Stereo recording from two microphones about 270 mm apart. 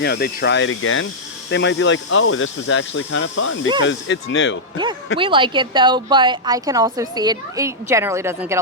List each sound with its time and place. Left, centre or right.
0.0 s speech: left
5.1 s a woman's voice: centre